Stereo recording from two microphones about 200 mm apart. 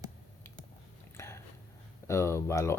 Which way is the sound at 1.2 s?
15° left (ahead or behind).